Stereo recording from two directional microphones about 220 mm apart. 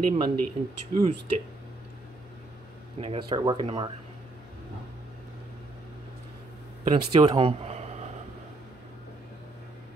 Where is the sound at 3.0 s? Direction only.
30° right (ahead or behind).